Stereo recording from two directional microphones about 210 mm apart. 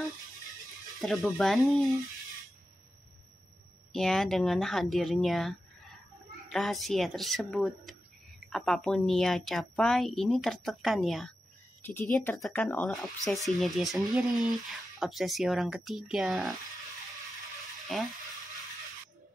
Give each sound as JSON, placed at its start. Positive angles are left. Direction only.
{"t": 1.0, "sound": "speech", "side_deg": 0}
{"t": 3.9, "sound": "speech", "side_deg": 0}
{"t": 11.8, "sound": "speech", "side_deg": 10}
{"t": 17.9, "sound": "speech", "side_deg": 0}